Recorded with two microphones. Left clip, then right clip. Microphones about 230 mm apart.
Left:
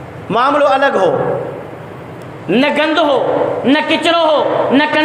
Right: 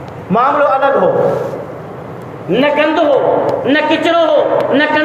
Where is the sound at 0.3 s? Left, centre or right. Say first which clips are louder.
Even; left.